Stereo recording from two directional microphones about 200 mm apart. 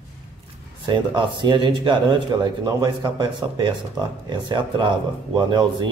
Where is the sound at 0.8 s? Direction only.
25° right (ahead or behind).